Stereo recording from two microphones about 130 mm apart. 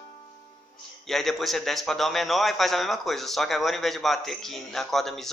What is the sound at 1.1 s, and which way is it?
A man's voice, centre (ahead or behind).